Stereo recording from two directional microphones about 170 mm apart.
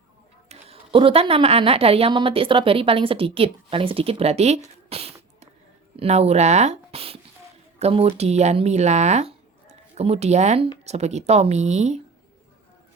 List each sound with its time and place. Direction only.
0.4 s a woman's voice: 35° right (ahead or behind)